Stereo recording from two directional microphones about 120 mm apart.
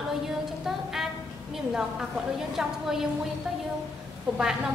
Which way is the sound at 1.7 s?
5° right (ahead or behind).